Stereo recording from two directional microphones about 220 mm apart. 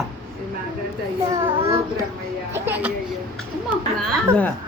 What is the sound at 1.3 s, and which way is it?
Child singing, 20° right (ahead or behind).